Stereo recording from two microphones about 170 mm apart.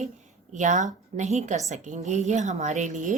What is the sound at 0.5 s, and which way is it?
A woman's voice, 45° right (ahead or behind).